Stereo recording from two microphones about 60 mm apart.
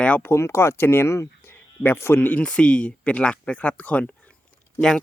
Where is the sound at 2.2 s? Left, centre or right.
Left.